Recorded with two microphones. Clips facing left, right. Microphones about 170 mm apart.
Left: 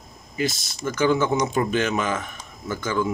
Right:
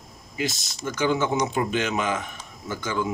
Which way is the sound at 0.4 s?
20° right (ahead or behind).